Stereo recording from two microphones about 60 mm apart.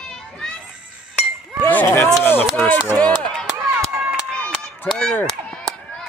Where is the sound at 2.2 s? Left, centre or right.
Left.